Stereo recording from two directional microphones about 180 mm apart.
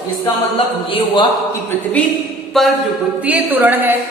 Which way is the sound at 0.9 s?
25° left (ahead or behind).